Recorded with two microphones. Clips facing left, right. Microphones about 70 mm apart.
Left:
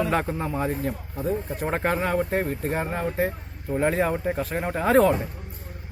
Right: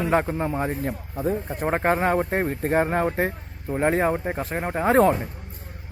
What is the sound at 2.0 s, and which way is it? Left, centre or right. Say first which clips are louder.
Speech: right 2 dB; right.